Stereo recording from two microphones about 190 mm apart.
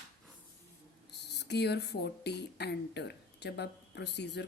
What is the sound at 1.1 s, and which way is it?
Speech, 60° left (ahead or behind).